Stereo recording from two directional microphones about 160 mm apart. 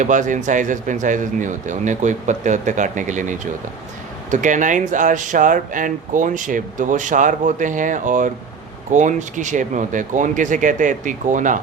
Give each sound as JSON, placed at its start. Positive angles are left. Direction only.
{"t": 0.0, "sound": "speech", "side_deg": -50}